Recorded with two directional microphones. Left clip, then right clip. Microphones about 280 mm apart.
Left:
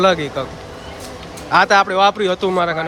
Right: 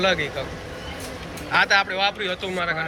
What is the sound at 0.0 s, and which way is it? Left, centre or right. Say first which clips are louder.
Speech: left 6 dB; centre.